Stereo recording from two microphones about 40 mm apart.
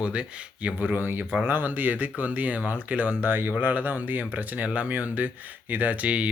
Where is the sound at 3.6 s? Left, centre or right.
Right.